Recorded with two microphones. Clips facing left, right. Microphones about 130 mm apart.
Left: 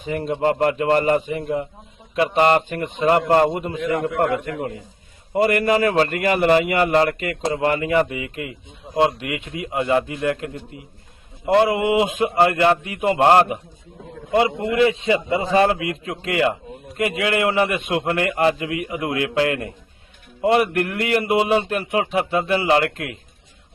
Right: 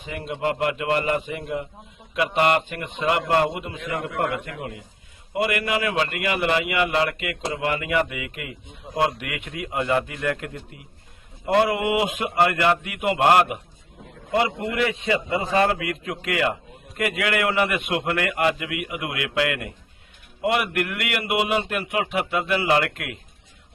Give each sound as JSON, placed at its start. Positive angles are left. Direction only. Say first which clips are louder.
{"t": 0.0, "sound": "a man's voice", "louder": "left 6 dB", "side_deg": 40}